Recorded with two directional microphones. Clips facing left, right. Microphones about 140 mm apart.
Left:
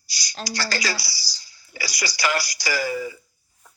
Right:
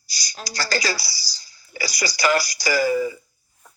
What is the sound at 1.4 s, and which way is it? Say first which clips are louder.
Speech: right 4 dB; 45° right (ahead or behind).